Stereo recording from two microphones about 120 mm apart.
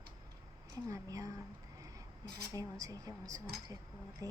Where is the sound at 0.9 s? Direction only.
30° right (ahead or behind).